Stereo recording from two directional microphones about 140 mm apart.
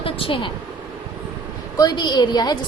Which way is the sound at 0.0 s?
40° left (ahead or behind).